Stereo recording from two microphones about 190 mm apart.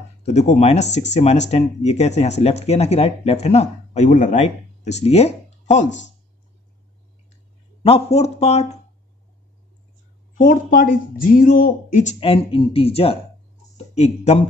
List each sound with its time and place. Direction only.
0.2 s speech: 35° left (ahead or behind)
7.8 s speech: 30° left (ahead or behind)
10.3 s speech: 45° left (ahead or behind)